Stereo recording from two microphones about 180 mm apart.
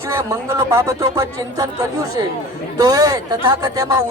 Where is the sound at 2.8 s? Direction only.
20° right (ahead or behind).